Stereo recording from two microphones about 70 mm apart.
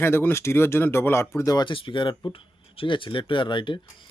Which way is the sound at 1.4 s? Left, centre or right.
Left.